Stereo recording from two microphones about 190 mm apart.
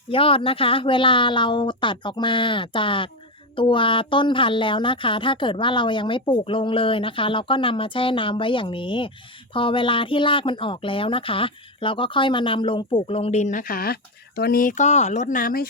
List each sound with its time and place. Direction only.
0.1 s speech: 30° left (ahead or behind); by 15.7 s 50° left (ahead or behind)